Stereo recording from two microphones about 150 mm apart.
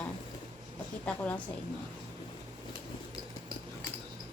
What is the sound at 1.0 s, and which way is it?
Speech, 10° left (ahead or behind).